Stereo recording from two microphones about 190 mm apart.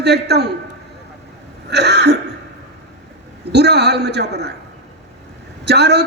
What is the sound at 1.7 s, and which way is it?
Speech, 60° right (ahead or behind).